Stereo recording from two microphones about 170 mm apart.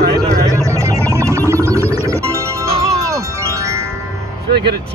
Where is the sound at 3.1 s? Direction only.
15° right (ahead or behind).